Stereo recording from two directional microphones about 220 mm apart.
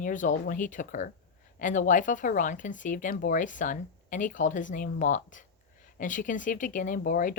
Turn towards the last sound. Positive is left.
turn(degrees=40)  # may be behind; listen again after turning